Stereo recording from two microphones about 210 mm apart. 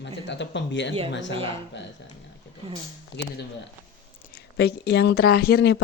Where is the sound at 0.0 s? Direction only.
55° left (ahead or behind).